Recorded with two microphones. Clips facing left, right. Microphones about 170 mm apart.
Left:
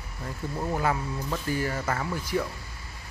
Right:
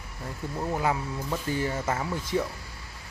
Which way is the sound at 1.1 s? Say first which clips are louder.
Even; 10° right (ahead or behind).